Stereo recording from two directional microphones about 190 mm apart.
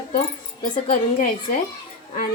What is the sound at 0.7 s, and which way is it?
Speech, 45° left (ahead or behind).